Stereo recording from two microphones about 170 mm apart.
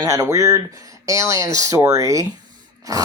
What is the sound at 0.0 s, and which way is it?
Speech, 15° right (ahead or behind).